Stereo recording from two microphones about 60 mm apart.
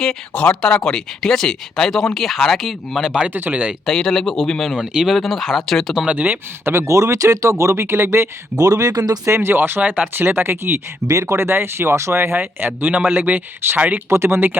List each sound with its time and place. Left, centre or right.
0.3 s speech: centre
3.2 s speech: right
3.8 s speech: centre
6.1 s speech: right
6.7 s speech: right
7.9 s speech: right
8.5 s speech: right
9.2 s speech: right
11.1 s speech: right
13.0 s speech: right
14.1 s speech: right